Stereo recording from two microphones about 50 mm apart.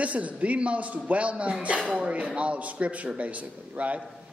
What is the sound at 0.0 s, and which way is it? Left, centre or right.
A man's voice, right.